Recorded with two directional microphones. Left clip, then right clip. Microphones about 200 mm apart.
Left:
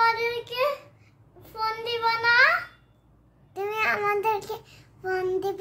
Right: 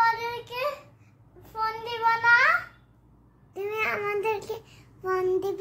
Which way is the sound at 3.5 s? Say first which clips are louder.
Left 3 dB; 15° left (ahead or behind).